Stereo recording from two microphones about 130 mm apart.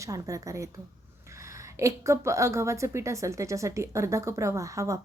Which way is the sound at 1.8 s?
20° right (ahead or behind).